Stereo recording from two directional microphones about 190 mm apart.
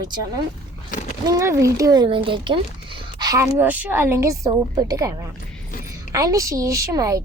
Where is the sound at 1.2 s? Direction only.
15° right (ahead or behind).